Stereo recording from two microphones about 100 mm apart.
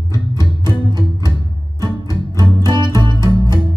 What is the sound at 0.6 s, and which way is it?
Music, 45° right (ahead or behind).